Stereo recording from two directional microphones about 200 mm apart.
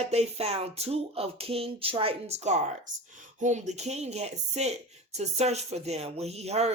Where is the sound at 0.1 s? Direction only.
30° right (ahead or behind).